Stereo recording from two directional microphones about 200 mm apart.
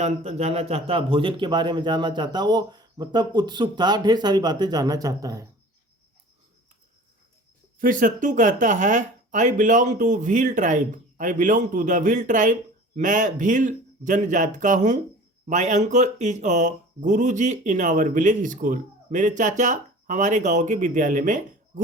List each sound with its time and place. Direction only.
0.0 s speech: 30° right (ahead or behind); by 5.5 s 15° right (ahead or behind)
7.8 s speech: 40° right (ahead or behind)